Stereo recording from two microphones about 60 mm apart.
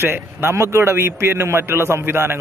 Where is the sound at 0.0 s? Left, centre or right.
Right.